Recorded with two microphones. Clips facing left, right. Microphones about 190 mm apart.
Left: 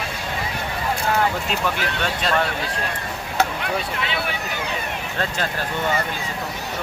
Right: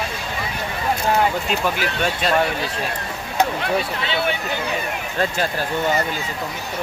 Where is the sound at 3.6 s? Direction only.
30° right (ahead or behind).